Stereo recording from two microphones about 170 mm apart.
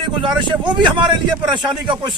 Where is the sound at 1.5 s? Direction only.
25° right (ahead or behind).